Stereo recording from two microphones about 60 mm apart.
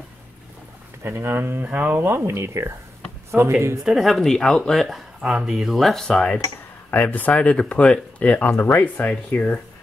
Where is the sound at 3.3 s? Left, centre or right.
Right.